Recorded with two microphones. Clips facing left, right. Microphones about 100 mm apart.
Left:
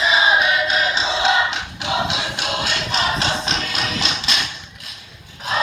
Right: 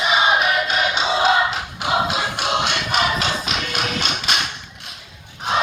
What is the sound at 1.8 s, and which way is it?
Music, 45° right (ahead or behind).